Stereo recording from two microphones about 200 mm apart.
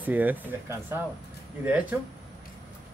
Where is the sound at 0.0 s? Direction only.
10° right (ahead or behind).